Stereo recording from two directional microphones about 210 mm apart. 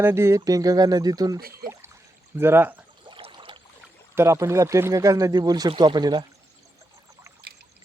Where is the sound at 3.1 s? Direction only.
25° right (ahead or behind).